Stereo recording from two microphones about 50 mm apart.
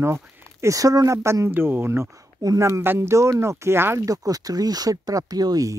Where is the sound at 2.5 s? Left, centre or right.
Right.